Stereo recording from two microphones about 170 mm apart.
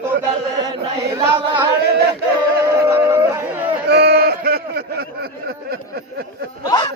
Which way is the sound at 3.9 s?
75° right (ahead or behind).